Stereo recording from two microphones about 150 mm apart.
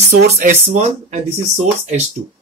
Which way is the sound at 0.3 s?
50° right (ahead or behind).